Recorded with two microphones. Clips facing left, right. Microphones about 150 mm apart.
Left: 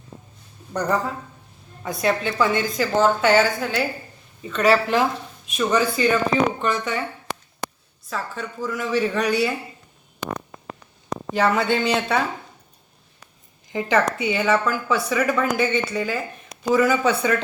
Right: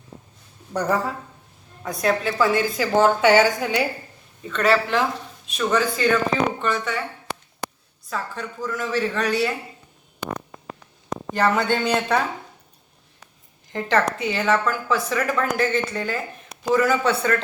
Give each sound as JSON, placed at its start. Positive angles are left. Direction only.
{"t": 0.7, "sound": "a woman's voice", "side_deg": -5}
{"t": 4.4, "sound": "a woman's voice", "side_deg": 10}
{"t": 8.1, "sound": "a woman's voice", "side_deg": 5}
{"t": 11.3, "sound": "a woman's voice", "side_deg": 5}
{"t": 13.7, "sound": "a woman's voice", "side_deg": 5}